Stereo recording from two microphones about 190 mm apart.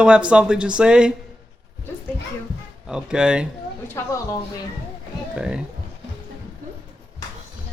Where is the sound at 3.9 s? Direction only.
15° left (ahead or behind).